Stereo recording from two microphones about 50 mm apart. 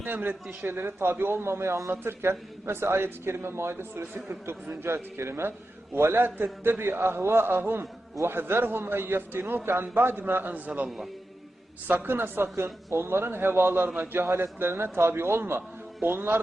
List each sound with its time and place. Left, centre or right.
0.0 s a man's voice: right
1.9 s a man's voice: right
10.8 s a man's voice: centre
11.9 s a man's voice: right